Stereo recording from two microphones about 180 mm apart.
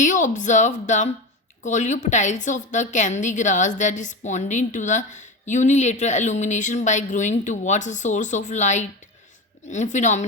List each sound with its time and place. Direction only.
0.0 s a woman's voice: 45° left (ahead or behind)